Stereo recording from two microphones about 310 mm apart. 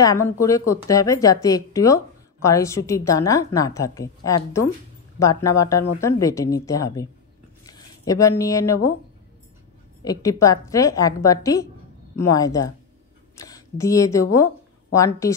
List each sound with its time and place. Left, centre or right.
0.0 s a woman's voice: centre
7.6 s a sound: centre
10.0 s a woman's voice: centre